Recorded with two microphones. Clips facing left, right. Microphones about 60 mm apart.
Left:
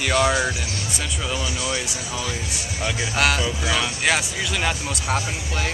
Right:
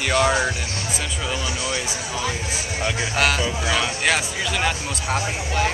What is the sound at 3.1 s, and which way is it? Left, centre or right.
Speech, centre.